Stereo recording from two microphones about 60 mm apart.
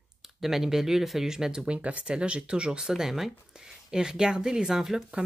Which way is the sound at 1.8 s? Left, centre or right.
Right.